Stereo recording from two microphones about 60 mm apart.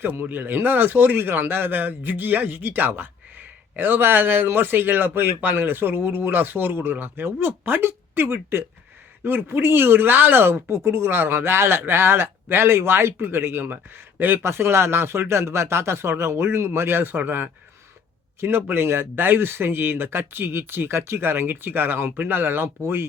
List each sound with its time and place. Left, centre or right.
0.0 s a man's voice: right